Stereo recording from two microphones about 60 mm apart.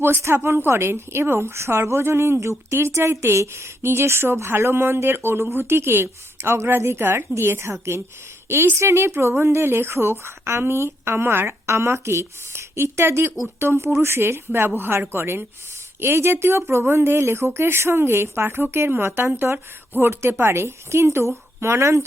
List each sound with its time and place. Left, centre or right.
0.4 s a woman's voice: right